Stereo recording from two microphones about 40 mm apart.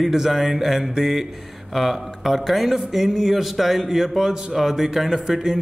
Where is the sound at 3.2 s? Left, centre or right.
Centre.